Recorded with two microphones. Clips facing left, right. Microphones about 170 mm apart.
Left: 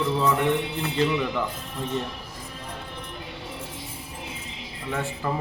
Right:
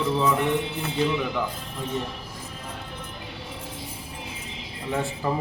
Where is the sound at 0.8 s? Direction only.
Centre (ahead or behind).